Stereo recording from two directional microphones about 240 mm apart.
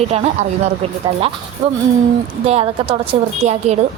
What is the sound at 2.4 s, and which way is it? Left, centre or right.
A woman's voice, right.